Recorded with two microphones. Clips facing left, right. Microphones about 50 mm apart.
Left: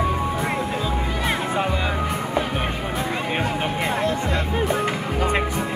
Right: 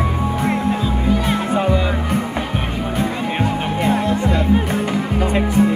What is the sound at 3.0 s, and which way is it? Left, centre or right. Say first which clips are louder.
Music: right 4 dB; centre.